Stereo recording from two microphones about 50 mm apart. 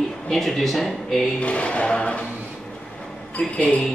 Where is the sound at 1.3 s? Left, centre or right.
Left.